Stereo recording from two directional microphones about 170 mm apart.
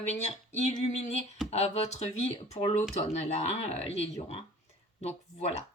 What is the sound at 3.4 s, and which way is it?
Speech, 35° left (ahead or behind).